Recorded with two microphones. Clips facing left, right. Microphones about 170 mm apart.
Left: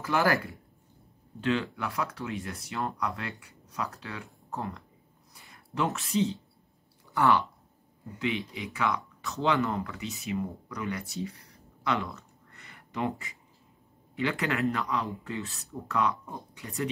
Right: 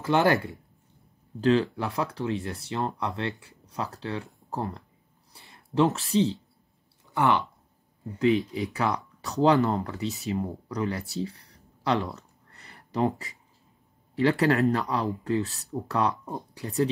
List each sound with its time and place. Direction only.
0.0 s speech: 20° right (ahead or behind)
1.4 s speech: 35° right (ahead or behind)
5.3 s a sound: 30° right (ahead or behind)
5.9 s speech: 35° right (ahead or behind)
7.1 s speech: 20° right (ahead or behind)
8.7 s speech: 40° right (ahead or behind)
14.1 s speech: 35° right (ahead or behind)